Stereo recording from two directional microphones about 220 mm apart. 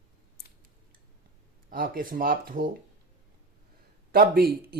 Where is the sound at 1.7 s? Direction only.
40° right (ahead or behind).